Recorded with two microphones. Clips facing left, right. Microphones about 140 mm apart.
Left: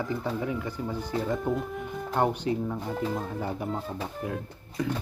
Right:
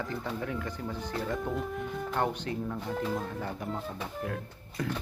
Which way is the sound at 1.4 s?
Centre (ahead or behind).